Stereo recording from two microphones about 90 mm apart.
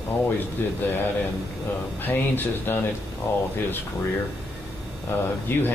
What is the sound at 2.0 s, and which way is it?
Speech, 20° left (ahead or behind).